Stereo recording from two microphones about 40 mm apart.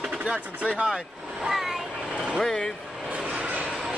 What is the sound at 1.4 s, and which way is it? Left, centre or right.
Vehicle, centre.